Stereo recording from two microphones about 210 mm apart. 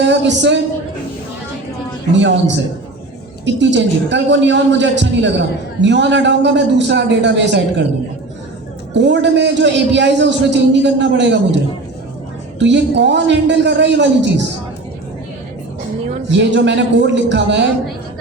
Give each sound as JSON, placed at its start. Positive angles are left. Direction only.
{"t": 0.0, "sound": "a woman's voice", "side_deg": -55}
{"t": 2.1, "sound": "a woman's voice", "side_deg": -60}
{"t": 3.4, "sound": "a woman's voice", "side_deg": -55}
{"t": 8.9, "sound": "a woman's voice", "side_deg": -55}
{"t": 12.5, "sound": "a woman's voice", "side_deg": -55}
{"t": 16.3, "sound": "a woman's voice", "side_deg": -55}